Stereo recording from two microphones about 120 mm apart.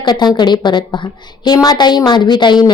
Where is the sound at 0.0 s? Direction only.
35° left (ahead or behind).